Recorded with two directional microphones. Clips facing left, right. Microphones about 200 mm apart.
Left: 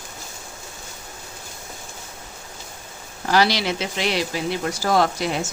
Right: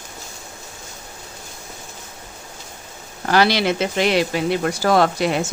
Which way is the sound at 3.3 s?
55° right (ahead or behind).